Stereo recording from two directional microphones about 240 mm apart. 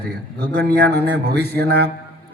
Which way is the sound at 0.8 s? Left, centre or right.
Right.